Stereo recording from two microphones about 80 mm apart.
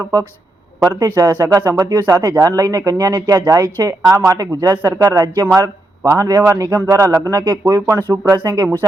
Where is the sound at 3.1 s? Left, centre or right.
Right.